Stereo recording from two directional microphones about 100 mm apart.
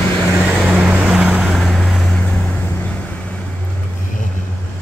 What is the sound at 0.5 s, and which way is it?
Vehicle, 5° right (ahead or behind).